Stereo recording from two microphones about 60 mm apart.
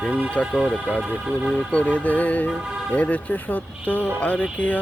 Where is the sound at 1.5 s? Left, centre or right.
Left.